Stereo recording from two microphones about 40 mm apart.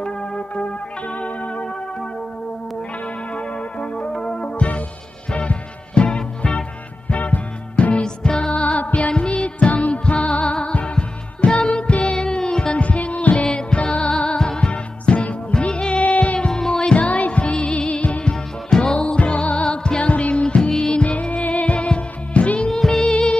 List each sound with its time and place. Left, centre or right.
0.0 s music: centre
0.6 s music: left
3.3 s music: left
4.4 s music: left
9.1 s music: left
12.8 s music: left
13.5 s music: left
16.3 s music: centre
16.9 s music: left
18.3 s music: centre
21.0 s music: left
22.7 s music: centre